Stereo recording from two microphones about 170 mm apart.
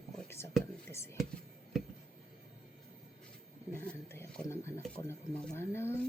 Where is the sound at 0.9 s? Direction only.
15° left (ahead or behind).